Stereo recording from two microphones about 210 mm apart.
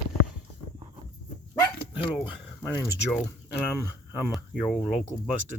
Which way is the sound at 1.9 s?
25° left (ahead or behind).